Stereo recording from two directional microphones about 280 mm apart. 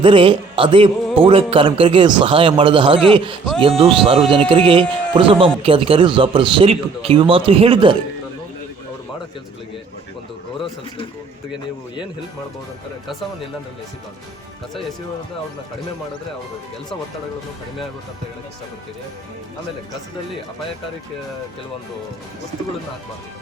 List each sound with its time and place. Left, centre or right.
0.0 s a man's voice: centre